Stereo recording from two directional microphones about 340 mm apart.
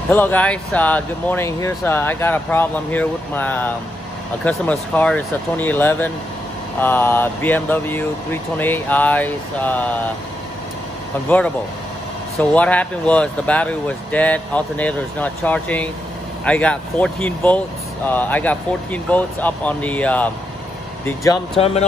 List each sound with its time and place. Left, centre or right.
0.1 s speech: centre
11.2 s speech: centre